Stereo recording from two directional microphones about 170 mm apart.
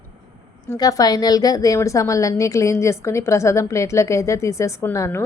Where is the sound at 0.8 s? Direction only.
20° left (ahead or behind).